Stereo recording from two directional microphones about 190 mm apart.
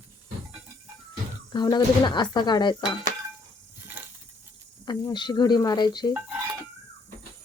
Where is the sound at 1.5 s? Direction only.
20° left (ahead or behind).